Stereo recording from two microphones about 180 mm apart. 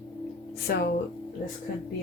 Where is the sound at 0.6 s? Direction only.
60° left (ahead or behind).